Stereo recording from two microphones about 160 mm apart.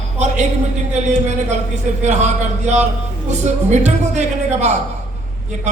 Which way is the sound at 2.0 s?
45° right (ahead or behind).